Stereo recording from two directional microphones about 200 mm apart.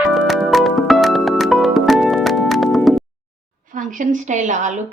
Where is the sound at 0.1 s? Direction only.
Centre (ahead or behind).